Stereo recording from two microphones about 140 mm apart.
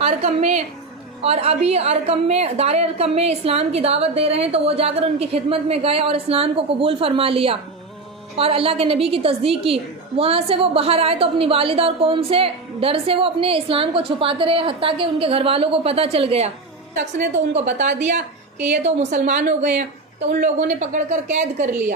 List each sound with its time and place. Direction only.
0.0 s a woman's voice: 50° right (ahead or behind)
17.5 s a woman's voice: 55° right (ahead or behind)